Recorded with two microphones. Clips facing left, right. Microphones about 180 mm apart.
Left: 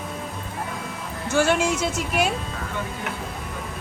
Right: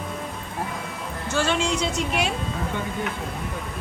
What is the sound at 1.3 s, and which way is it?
Speech, 10° left (ahead or behind).